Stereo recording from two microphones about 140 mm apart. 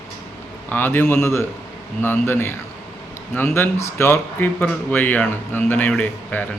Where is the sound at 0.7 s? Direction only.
15° left (ahead or behind).